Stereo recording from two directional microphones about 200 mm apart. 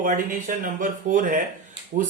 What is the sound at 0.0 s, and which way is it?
Speech, 40° right (ahead or behind).